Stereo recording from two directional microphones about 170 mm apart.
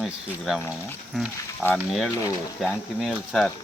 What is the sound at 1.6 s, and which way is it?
Speech, 5° left (ahead or behind).